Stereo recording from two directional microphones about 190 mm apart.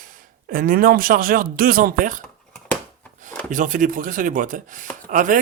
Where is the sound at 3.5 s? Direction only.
45° right (ahead or behind).